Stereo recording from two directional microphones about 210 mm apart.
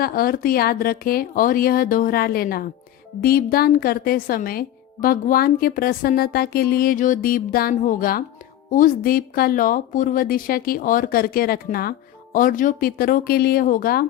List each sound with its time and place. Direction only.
0.0 s speech: 45° left (ahead or behind)